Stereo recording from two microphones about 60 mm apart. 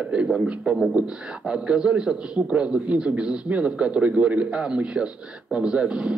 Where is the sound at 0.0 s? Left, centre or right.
Centre.